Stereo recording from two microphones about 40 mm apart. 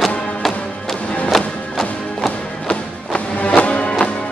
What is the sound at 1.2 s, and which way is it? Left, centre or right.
Music, centre.